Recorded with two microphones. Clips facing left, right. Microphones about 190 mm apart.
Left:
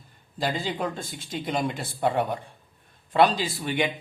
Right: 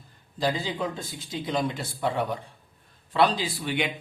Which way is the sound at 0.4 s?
55° left (ahead or behind).